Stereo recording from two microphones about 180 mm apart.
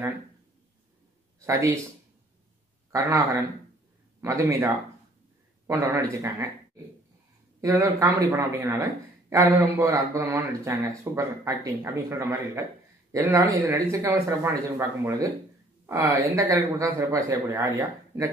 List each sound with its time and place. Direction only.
1.4 s speech: 15° right (ahead or behind)
2.9 s speech: 15° right (ahead or behind)
7.6 s speech: 15° right (ahead or behind)